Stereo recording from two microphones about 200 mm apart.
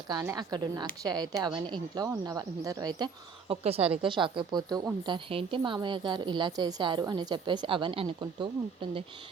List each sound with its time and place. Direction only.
0.1 s speech: 20° right (ahead or behind)
3.5 s speech: 30° right (ahead or behind)